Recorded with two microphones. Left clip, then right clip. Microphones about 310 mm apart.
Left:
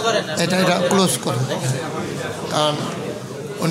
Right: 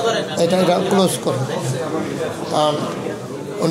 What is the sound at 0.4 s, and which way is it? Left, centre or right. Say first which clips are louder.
Speech: right 5 dB; left.